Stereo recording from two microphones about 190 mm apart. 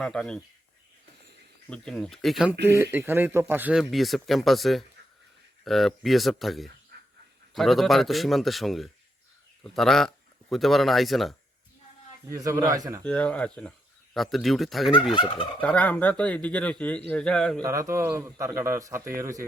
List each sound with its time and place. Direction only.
0.0 s speech: 5° left (ahead or behind)
1.7 s speech: 5° left (ahead or behind)
2.6 s speech: 15° right (ahead or behind)
6.9 s dog: 60° right (ahead or behind)
7.5 s speech: centre (ahead or behind)
12.3 s speech: 15° right (ahead or behind)
13.1 s speech: 5° left (ahead or behind)
15.1 s turkey: 25° left (ahead or behind)
15.6 s speech: 5° left (ahead or behind)
17.6 s speech: 15° right (ahead or behind)